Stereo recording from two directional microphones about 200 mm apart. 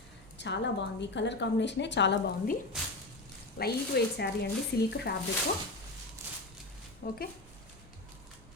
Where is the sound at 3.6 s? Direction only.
55° left (ahead or behind).